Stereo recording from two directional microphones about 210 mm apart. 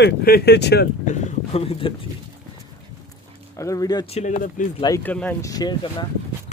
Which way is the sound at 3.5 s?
15° left (ahead or behind).